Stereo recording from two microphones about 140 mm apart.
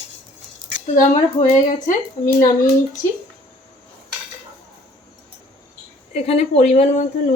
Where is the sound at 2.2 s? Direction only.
35° left (ahead or behind).